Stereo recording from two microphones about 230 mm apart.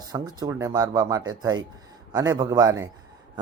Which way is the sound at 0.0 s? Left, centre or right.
Centre.